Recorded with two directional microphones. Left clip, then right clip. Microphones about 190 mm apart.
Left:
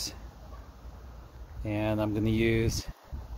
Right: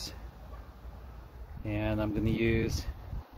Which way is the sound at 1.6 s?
35° left (ahead or behind).